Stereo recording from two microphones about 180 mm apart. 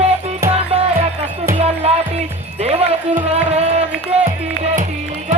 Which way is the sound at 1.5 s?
35° right (ahead or behind).